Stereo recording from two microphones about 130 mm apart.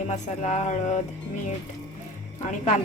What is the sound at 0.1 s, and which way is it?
Speech, 65° left (ahead or behind).